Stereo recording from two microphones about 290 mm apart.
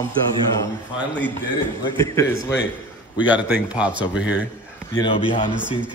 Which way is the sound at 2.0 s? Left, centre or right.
Centre.